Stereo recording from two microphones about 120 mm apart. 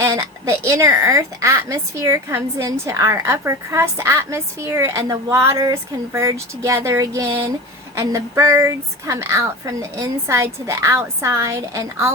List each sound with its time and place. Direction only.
0.0 s a woman's voice: 25° right (ahead or behind)